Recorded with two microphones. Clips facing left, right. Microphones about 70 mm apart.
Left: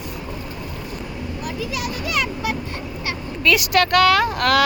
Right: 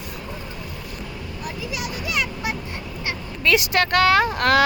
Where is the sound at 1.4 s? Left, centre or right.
Right.